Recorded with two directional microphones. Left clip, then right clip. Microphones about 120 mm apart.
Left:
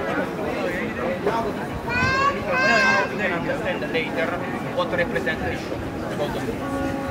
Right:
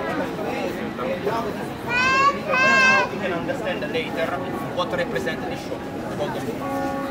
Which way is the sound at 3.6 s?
30° right (ahead or behind).